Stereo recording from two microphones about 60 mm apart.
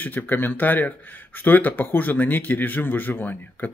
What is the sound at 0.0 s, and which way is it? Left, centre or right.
Speech, left.